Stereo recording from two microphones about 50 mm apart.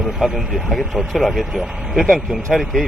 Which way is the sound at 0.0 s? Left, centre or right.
Centre.